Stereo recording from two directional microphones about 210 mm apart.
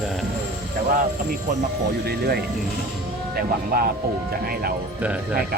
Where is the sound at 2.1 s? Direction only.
50° right (ahead or behind).